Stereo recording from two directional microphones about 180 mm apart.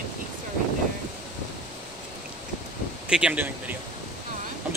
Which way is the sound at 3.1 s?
5° right (ahead or behind).